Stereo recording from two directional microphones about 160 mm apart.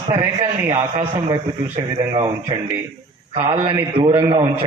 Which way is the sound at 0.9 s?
30° right (ahead or behind).